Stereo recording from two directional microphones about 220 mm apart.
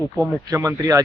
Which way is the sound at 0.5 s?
15° right (ahead or behind).